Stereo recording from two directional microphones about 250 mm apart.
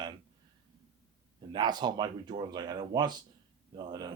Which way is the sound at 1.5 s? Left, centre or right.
Centre.